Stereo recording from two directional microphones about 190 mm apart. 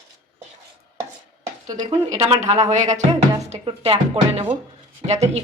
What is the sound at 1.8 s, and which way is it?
Speech, 30° right (ahead or behind).